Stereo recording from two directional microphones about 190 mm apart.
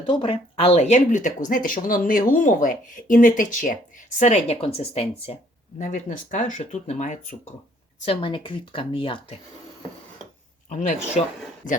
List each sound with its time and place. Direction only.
0.0 s speech: 25° left (ahead or behind)
8.0 s speech: 30° left (ahead or behind)
10.7 s speech: 40° left (ahead or behind)